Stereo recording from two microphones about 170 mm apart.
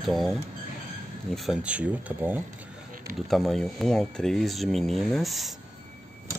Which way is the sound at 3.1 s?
Centre (ahead or behind).